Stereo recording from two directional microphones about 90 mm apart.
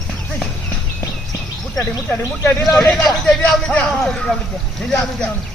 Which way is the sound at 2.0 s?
25° left (ahead or behind).